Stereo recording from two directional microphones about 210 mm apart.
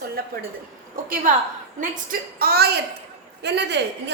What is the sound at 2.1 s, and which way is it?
A child's voice, 45° right (ahead or behind).